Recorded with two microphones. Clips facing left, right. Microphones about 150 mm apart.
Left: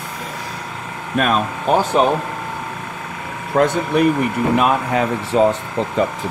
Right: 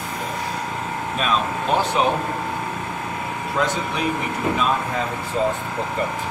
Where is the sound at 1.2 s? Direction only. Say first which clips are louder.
Left 8 dB; 55° left (ahead or behind).